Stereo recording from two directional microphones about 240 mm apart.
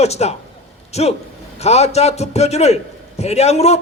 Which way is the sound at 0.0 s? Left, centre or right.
Left.